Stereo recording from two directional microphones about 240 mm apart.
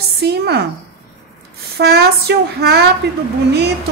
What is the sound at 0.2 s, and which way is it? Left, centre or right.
Speech, right.